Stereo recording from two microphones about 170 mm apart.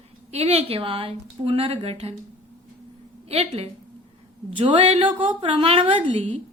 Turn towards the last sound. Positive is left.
turn(degrees=-30)  # may be behind; listen again after turning